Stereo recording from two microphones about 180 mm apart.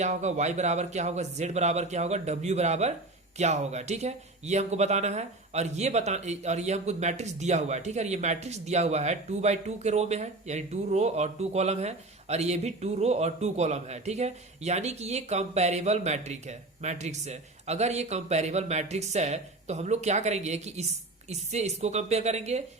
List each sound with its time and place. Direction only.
0.0 s speech: 40° right (ahead or behind)